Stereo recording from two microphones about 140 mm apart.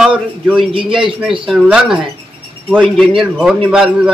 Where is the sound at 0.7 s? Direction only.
40° right (ahead or behind).